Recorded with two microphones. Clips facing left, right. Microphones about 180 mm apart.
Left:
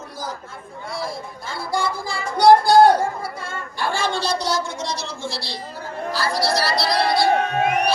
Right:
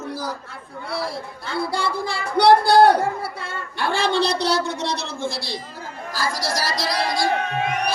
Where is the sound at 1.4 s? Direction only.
65° right (ahead or behind); by 5.5 s 50° right (ahead or behind).